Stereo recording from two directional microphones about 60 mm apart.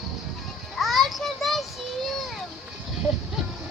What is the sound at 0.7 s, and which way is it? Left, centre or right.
Music, centre.